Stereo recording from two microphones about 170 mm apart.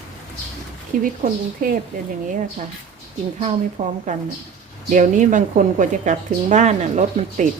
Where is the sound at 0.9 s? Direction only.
55° right (ahead or behind).